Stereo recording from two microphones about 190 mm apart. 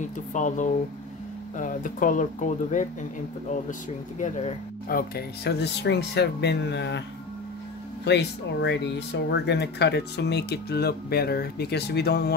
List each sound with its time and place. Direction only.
0.0 s speech: 40° left (ahead or behind)
4.2 s speech: 35° left (ahead or behind)
4.8 s speech: 50° left (ahead or behind)
8.0 s speech: 65° left (ahead or behind)